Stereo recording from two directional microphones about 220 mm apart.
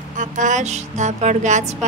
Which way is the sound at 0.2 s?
35° right (ahead or behind).